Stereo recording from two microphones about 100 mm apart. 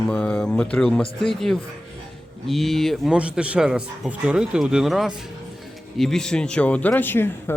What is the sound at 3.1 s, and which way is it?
Speech, 10° right (ahead or behind).